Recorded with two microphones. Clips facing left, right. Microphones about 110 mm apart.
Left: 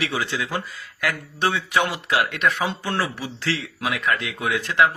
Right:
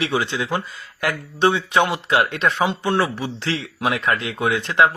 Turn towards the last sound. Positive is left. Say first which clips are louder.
# right 3 dB
turn(degrees=-30)  # may be behind; listen again after turning